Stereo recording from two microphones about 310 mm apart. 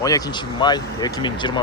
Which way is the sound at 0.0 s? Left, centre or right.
Centre.